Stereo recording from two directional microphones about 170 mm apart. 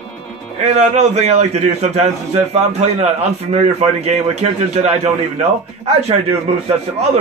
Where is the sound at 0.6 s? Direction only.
45° right (ahead or behind).